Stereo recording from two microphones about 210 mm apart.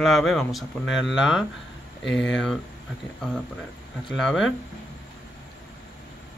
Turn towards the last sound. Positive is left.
turn(degrees=0)  # may be behind; listen again after turning